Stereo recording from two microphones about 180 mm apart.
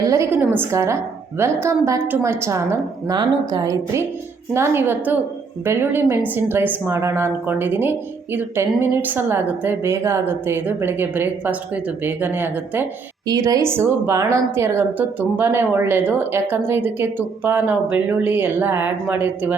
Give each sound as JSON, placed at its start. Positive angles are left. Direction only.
{"t": 0.0, "sound": "a woman's voice", "side_deg": -15}